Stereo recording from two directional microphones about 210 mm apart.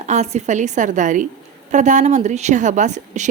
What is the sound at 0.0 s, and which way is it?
A woman's voice, 35° right (ahead or behind).